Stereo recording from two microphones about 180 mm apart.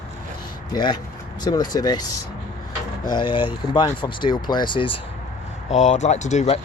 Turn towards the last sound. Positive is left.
turn(degrees=35)  # may be behind; listen again after turning